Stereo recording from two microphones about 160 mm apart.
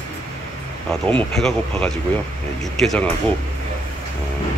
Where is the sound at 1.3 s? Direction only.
5° left (ahead or behind).